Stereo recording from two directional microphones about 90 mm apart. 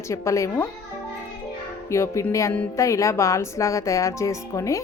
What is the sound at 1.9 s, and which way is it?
A woman's voice, 35° left (ahead or behind).